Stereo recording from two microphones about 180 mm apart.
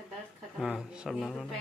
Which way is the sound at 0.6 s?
5° right (ahead or behind).